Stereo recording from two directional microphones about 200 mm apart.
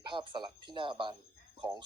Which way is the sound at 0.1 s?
25° right (ahead or behind).